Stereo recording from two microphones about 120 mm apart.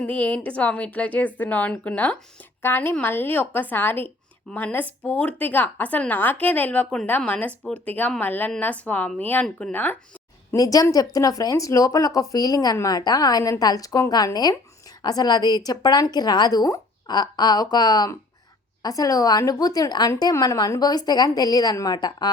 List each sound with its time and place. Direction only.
0.0 s a woman's voice: 10° left (ahead or behind)
10.5 s a woman's voice: 30° left (ahead or behind)